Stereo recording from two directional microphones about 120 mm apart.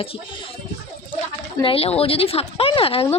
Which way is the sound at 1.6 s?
55° left (ahead or behind).